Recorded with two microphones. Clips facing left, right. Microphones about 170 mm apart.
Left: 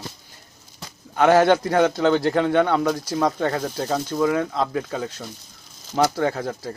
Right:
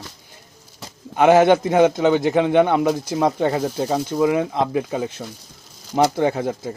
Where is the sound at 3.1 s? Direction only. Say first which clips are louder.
Right 2 dB; 25° right (ahead or behind).